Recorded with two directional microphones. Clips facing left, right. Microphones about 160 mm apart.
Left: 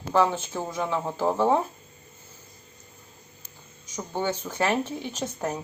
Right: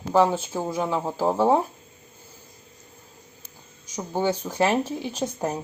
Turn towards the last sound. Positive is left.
turn(degrees=-15)  # may be behind; listen again after turning